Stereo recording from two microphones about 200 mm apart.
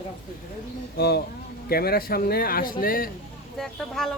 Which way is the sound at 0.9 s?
50° left (ahead or behind).